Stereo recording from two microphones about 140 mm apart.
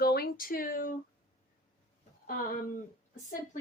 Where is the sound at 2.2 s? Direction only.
85° left.